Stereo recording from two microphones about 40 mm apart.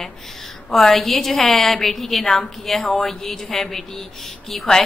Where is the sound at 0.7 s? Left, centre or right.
Centre.